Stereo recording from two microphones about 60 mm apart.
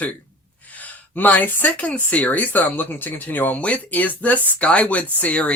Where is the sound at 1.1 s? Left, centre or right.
Left.